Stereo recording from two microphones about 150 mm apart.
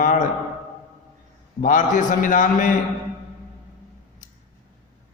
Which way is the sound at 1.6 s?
60° left (ahead or behind).